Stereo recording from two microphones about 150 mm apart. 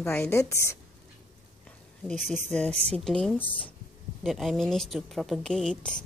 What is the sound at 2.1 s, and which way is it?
A woman's voice, centre (ahead or behind).